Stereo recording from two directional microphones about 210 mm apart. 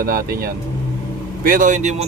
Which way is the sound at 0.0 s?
45° right (ahead or behind).